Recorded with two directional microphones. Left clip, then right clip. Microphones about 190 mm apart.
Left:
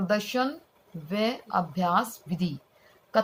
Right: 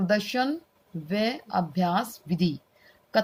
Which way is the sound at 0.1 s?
45° right (ahead or behind).